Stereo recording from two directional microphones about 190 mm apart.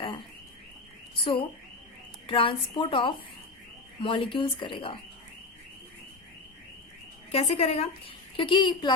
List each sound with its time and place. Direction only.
1.2 s speech: 30° left (ahead or behind)
7.3 s a woman's voice: 35° left (ahead or behind)